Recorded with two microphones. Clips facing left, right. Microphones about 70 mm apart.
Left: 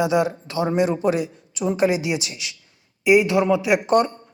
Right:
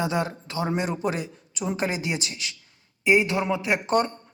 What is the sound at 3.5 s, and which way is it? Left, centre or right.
Speech, centre.